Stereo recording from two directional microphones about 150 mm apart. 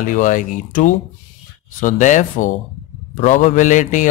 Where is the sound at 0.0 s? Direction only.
60° left (ahead or behind).